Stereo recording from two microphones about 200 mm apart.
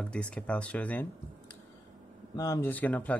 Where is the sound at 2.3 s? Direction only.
15° left (ahead or behind).